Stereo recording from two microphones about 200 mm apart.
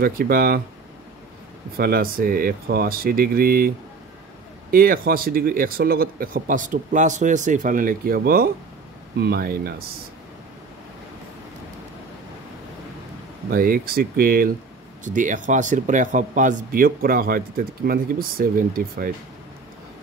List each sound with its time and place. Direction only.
0.0 s speech: 45° right (ahead or behind)
1.8 s speech: 50° right (ahead or behind)
13.5 s speech: 45° right (ahead or behind)